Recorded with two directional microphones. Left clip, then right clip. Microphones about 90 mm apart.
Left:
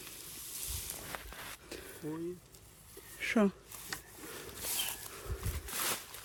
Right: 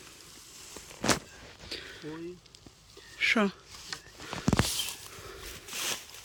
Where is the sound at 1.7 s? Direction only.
25° left (ahead or behind).